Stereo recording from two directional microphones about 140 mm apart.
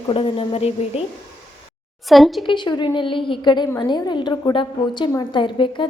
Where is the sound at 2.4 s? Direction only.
35° left (ahead or behind).